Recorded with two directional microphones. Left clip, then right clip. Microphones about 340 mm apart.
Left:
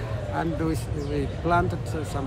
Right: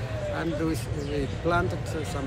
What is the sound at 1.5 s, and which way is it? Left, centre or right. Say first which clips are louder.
Speech: left 3 dB; centre.